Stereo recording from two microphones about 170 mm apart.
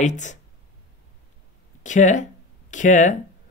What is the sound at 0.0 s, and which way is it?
Speech, 45° left (ahead or behind).